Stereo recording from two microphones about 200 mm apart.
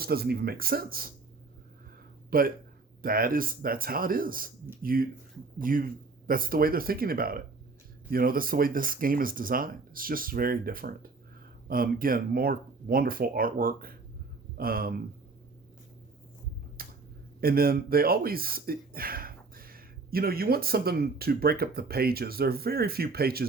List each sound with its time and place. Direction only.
0.0 s speech: 50° right (ahead or behind)
2.3 s speech: 45° right (ahead or behind)
16.8 s finger snapping: 45° right (ahead or behind)
17.4 s speech: 50° right (ahead or behind)